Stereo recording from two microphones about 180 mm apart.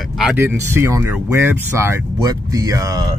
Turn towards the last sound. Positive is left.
turn(degrees=-20)  # may be behind; listen again after turning